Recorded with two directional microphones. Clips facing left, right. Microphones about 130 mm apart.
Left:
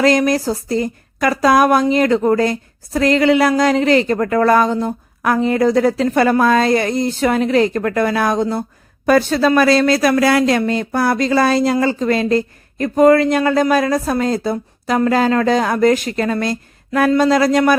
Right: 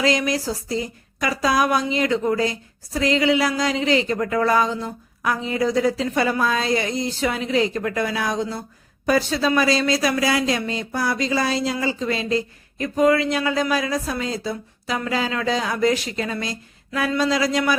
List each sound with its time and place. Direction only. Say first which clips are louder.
0.0 s speech: left 7 dB; 50° left (ahead or behind)